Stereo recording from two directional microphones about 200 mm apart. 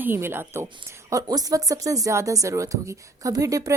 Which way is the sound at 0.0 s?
10° right (ahead or behind).